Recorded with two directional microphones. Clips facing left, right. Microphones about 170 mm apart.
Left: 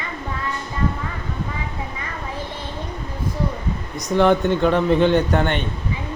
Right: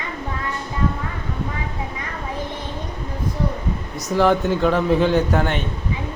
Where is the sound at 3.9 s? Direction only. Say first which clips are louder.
Left 1 dB; 5° right (ahead or behind).